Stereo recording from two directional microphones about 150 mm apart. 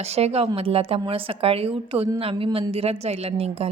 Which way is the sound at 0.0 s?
45° right (ahead or behind).